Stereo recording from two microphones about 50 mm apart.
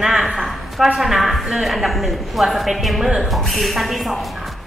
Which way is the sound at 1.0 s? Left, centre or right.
Centre.